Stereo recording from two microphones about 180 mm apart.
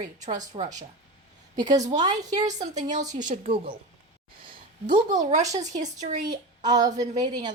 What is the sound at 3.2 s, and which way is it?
Speech, 45° right (ahead or behind).